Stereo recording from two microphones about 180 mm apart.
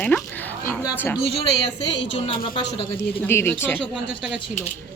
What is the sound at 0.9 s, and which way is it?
Speech, 10° left (ahead or behind).